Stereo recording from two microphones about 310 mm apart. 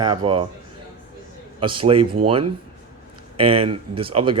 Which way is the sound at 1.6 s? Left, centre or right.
Centre.